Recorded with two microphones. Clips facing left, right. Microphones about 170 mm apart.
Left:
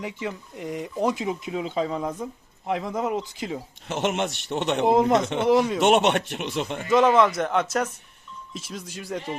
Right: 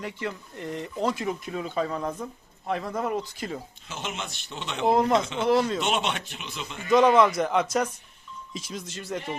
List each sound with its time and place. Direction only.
0.0 s speech: 15° left (ahead or behind)
3.8 s a man's voice: 70° left (ahead or behind)
4.9 s speech: 20° left (ahead or behind)
5.2 s speech: 65° left (ahead or behind)
5.5 s speech: 15° left (ahead or behind)
5.8 s speech: 60° left (ahead or behind)
6.9 s a man's voice: 5° left (ahead or behind)